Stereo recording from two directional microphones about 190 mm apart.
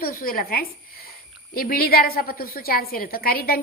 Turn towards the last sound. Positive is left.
turn(degrees=50)  # may be behind; listen again after turning